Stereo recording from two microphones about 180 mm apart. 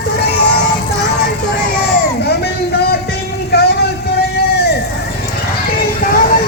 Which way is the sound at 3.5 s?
60° left (ahead or behind).